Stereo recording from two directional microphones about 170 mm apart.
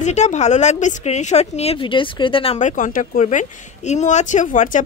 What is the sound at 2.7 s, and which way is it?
Speech, 50° left (ahead or behind).